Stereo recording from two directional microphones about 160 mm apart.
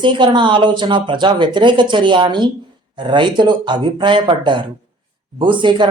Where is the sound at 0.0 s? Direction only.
30° right (ahead or behind).